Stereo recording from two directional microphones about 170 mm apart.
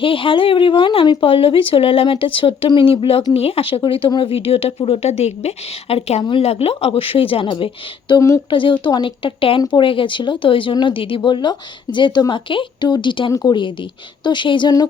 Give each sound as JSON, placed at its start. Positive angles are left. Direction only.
{"t": 0.0, "sound": "speech", "side_deg": 30}